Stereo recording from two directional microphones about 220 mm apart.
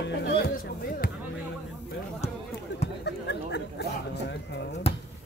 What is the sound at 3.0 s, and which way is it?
Speech, 50° left (ahead or behind).